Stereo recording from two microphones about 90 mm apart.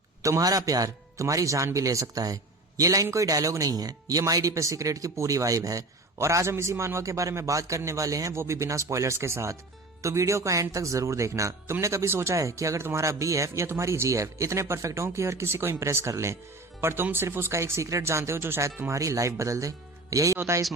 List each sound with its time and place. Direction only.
0.2 s speech: 40° right (ahead or behind)